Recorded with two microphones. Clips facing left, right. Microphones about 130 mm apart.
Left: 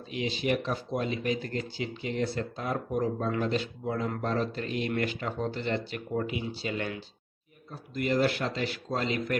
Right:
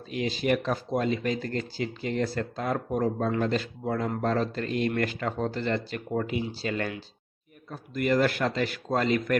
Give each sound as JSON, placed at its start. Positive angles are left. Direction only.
{"t": 0.1, "sound": "a man's voice", "side_deg": -40}
{"t": 7.7, "sound": "a man's voice", "side_deg": -55}